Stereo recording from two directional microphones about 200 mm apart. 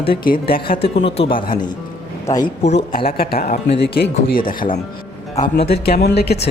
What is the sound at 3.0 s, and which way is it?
Speech, 50° left (ahead or behind).